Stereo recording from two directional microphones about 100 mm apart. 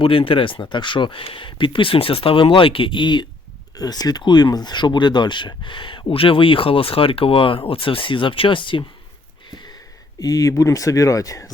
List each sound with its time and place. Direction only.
0.0 s speech: 65° left (ahead or behind)
9.5 s a sound: 45° left (ahead or behind)
10.2 s speech: 40° left (ahead or behind)